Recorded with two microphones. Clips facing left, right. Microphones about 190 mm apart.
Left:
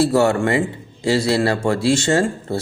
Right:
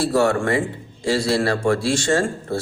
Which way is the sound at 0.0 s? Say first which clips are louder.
Left 3 dB; 25° left (ahead or behind).